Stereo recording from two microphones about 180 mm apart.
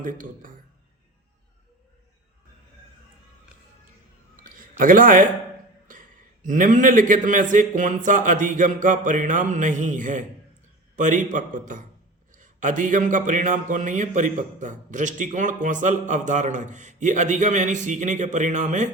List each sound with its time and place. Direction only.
0.0 s speech: 50° right (ahead or behind)
4.4 s a sound: 50° right (ahead or behind)
6.4 s speech: 45° right (ahead or behind)